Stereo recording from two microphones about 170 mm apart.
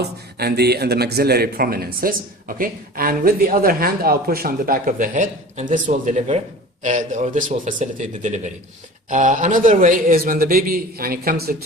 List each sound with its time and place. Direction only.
0.0 s a man's voice: 70° right (ahead or behind)